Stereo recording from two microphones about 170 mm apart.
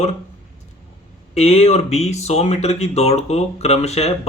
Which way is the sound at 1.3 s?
40° left (ahead or behind).